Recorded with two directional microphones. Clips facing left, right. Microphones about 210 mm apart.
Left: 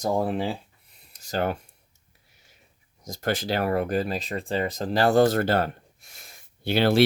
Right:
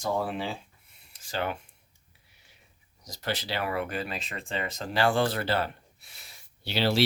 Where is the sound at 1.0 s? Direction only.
40° left (ahead or behind).